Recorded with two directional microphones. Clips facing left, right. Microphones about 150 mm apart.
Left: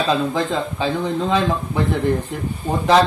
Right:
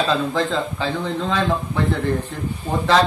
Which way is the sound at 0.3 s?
15° left (ahead or behind).